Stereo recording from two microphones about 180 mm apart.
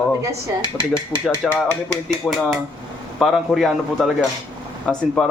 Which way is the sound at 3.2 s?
Centre (ahead or behind).